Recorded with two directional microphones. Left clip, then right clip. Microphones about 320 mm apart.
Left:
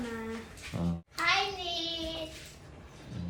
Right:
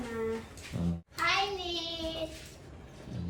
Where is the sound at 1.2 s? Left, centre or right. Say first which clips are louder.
Left 1 dB; centre.